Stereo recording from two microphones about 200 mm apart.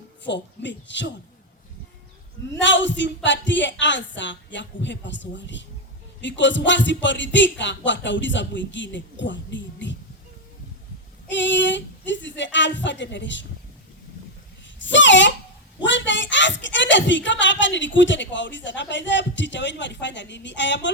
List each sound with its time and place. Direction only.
0.3 s speech: 65° left (ahead or behind)
2.6 s speech: 65° left (ahead or behind)
11.3 s speech: 65° left (ahead or behind)
14.8 s a sound: 65° left (ahead or behind)
15.8 s speech: 65° left (ahead or behind)